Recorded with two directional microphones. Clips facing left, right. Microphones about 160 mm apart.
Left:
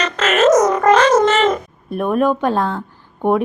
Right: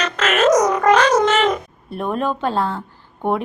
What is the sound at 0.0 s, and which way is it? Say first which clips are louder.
Music: left 2 dB; 10° right (ahead or behind).